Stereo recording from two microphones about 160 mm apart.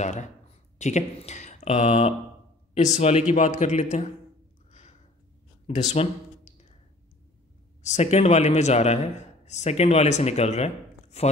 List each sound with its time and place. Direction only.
0.0 s a man's voice: 50° left (ahead or behind)
5.9 s a sound: 45° left (ahead or behind)
7.8 s a man's voice: 45° left (ahead or behind)